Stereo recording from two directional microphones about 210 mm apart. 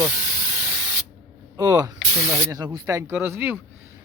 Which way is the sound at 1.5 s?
20° right (ahead or behind).